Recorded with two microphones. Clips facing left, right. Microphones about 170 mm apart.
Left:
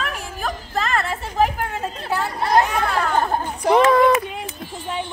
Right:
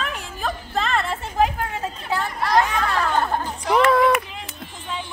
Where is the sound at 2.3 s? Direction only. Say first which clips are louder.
Left 2 dB; 25° left (ahead or behind).